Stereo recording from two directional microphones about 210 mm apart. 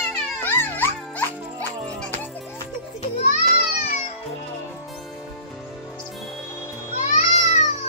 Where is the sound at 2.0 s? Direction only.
10° left (ahead or behind).